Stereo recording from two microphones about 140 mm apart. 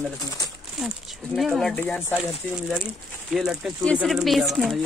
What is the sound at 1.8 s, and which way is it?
Speech, 15° left (ahead or behind).